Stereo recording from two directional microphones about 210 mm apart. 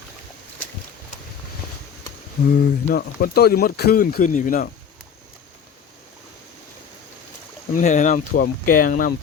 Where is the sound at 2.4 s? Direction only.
50° left (ahead or behind).